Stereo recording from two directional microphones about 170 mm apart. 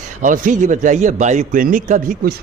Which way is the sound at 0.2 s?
50° right (ahead or behind).